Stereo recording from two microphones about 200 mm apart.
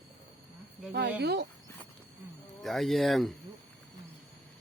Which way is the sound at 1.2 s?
55° right (ahead or behind).